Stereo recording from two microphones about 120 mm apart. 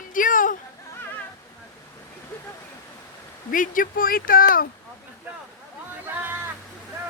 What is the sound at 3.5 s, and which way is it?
Speech, 90° left.